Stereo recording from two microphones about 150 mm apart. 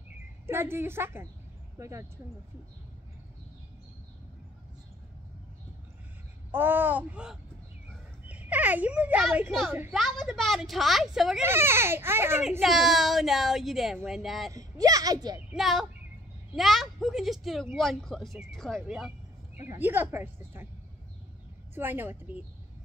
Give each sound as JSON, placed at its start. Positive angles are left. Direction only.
{"t": 0.5, "sound": "a woman's voice", "side_deg": -15}
{"t": 6.5, "sound": "a woman's voice", "side_deg": -15}
{"t": 9.9, "sound": "a woman's voice", "side_deg": 0}
{"t": 11.4, "sound": "a woman's voice", "side_deg": -15}
{"t": 12.4, "sound": "a woman's voice", "side_deg": 0}
{"t": 14.5, "sound": "a child's voice", "side_deg": -25}
{"t": 15.5, "sound": "a woman's voice", "side_deg": 0}
{"t": 19.5, "sound": "a woman's voice", "side_deg": -15}
{"t": 21.7, "sound": "a woman's voice", "side_deg": -15}